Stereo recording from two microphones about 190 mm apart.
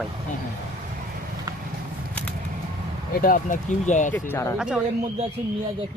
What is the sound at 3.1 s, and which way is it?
Speech, 45° left (ahead or behind).